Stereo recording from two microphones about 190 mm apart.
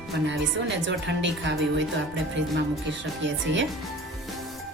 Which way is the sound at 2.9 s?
75° right (ahead or behind).